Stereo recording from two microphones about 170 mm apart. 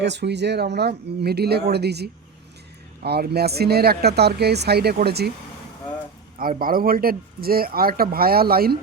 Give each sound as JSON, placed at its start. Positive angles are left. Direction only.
{"t": 0.0, "sound": "speech", "side_deg": -90}
{"t": 6.4, "sound": "speech", "side_deg": -55}